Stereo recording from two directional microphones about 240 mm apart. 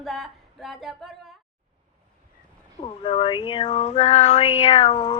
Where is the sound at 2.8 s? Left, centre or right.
Left.